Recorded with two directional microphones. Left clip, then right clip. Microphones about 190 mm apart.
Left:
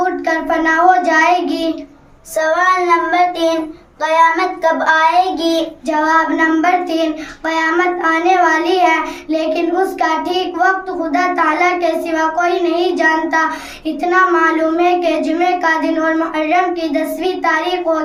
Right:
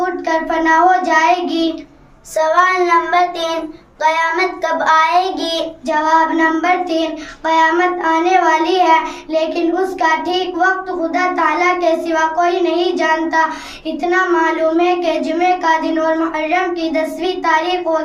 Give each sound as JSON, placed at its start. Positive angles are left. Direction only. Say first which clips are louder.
{"t": 0.0, "sound": "child singing", "louder": "left 1 dB", "side_deg": 15}
{"t": 2.6, "sound": "child singing", "louder": "left 1 dB", "side_deg": -15}
{"t": 5.9, "sound": "child singing", "louder": "even", "side_deg": 15}